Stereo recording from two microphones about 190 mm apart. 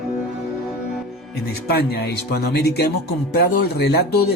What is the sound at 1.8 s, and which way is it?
Speech, 55° left (ahead or behind).